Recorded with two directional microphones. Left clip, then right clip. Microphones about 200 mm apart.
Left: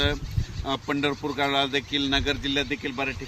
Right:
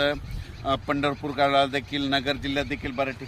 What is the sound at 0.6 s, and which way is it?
A man's voice, 25° right (ahead or behind).